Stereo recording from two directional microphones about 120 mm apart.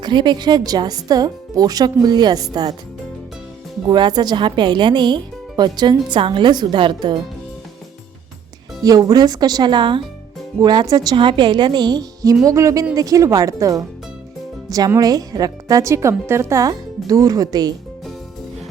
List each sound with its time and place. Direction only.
0.0 s speech: 40° right (ahead or behind)
3.8 s speech: 35° right (ahead or behind)
8.8 s speech: 30° right (ahead or behind)